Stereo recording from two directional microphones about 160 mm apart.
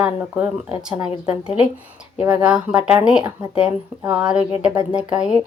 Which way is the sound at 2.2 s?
10° right (ahead or behind).